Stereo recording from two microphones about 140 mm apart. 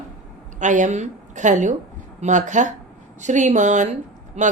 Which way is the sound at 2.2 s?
60° right (ahead or behind).